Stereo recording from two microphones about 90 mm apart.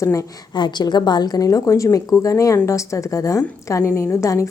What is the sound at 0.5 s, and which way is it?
A woman's voice, 55° left (ahead or behind).